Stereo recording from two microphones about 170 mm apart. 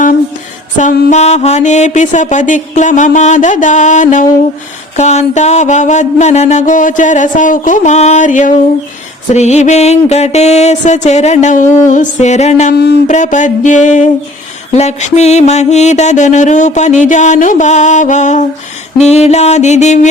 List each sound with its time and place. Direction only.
0.8 s mantra: 45° left (ahead or behind)
12.7 s speech: 75° left (ahead or behind)
13.1 s mantra: 45° left (ahead or behind)
18.9 s music: 40° left (ahead or behind)